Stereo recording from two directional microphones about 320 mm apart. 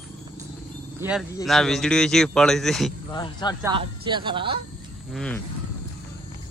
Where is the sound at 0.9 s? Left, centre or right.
Centre.